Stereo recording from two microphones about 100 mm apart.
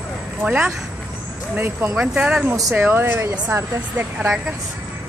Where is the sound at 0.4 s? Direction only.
20° right (ahead or behind).